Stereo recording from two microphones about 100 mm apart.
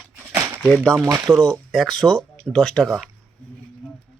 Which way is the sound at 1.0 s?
30° right (ahead or behind).